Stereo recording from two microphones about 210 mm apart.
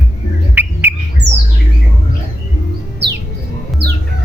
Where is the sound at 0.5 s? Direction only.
10° right (ahead or behind).